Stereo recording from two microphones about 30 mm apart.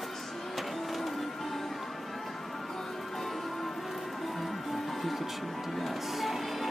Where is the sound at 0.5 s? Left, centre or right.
Centre.